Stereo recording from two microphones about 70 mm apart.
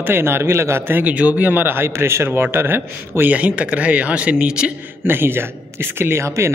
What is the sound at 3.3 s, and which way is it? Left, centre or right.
Speech, centre.